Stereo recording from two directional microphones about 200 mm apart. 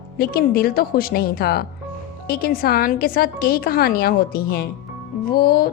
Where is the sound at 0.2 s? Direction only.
50° left (ahead or behind).